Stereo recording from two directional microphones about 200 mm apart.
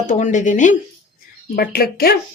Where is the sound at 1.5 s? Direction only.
50° left (ahead or behind).